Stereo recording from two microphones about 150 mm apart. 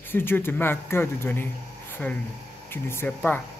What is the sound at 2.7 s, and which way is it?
Speech, 15° left (ahead or behind).